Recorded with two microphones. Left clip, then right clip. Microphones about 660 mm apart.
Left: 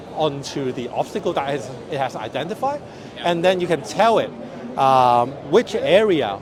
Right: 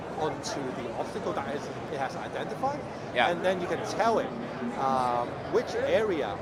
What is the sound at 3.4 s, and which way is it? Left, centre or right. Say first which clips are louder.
A man's voice: left 10 dB; left.